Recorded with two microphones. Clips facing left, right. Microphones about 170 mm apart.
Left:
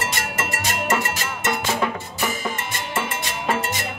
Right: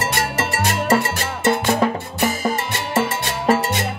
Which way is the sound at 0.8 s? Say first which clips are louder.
Right 4 dB; 35° right (ahead or behind).